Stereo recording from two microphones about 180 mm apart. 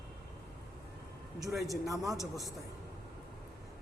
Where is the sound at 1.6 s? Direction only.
20° right (ahead or behind).